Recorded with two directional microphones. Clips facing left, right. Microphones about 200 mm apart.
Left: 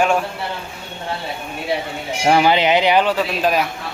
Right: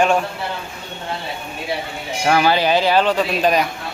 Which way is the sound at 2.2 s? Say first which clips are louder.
Left 1 dB; 20° left (ahead or behind).